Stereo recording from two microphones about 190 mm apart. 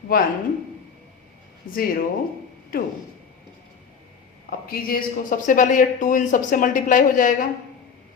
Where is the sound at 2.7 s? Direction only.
50° left (ahead or behind).